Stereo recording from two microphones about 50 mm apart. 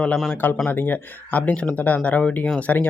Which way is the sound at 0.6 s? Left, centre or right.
Left.